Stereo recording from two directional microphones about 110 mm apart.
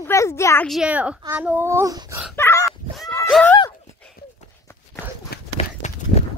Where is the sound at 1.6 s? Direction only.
25° right (ahead or behind).